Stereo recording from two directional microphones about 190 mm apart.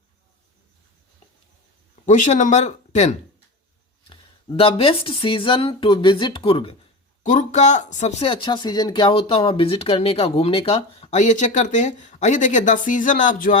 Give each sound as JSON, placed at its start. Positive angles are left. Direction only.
{"t": 2.0, "sound": "speech", "side_deg": 40}
{"t": 4.0, "sound": "speech", "side_deg": 25}
{"t": 7.2, "sound": "speech", "side_deg": 40}